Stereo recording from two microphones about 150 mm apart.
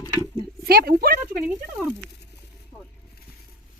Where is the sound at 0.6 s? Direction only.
90° right.